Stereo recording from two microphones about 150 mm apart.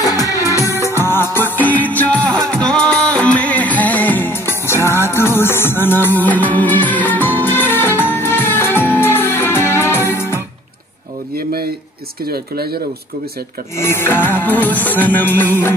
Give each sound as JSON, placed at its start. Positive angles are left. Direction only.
{"t": 0.0, "sound": "music", "side_deg": 25}
{"t": 11.3, "sound": "a sound", "side_deg": -90}
{"t": 13.7, "sound": "music", "side_deg": 15}